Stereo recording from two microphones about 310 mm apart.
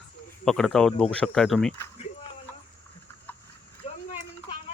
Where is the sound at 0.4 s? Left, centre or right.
Centre.